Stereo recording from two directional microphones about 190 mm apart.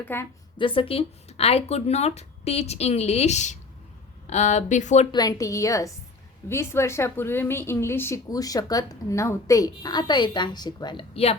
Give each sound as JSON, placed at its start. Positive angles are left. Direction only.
{"t": 0.0, "sound": "a woman's voice", "side_deg": 10}
{"t": 0.6, "sound": "speech", "side_deg": 30}
{"t": 5.1, "sound": "a woman's voice", "side_deg": 20}